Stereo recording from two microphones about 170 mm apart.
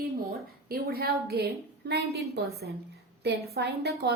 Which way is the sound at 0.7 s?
65° right (ahead or behind).